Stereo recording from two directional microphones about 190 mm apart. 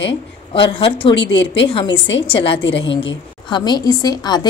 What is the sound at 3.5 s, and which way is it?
Speech, 20° left (ahead or behind).